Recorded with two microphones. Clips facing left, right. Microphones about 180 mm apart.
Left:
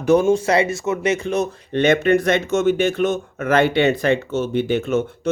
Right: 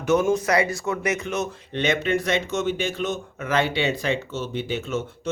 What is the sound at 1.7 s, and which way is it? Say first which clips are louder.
Speech: left 8 dB; 50° left (ahead or behind).